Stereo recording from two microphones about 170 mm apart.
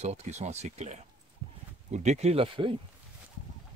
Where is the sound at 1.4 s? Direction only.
30° right (ahead or behind).